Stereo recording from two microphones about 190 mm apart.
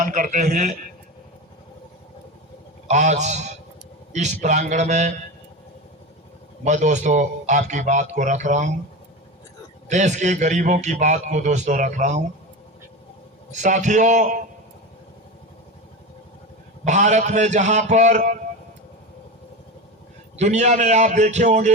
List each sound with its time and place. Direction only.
0.0 s a man's voice: 45° right (ahead or behind)
2.8 s a man's voice: 40° right (ahead or behind)
6.7 s a man's voice: 40° right (ahead or behind)
9.9 s a man's voice: 40° right (ahead or behind)
13.5 s a man's voice: 40° right (ahead or behind)
16.8 s a man's voice: 40° right (ahead or behind)
20.3 s a man's voice: 35° right (ahead or behind)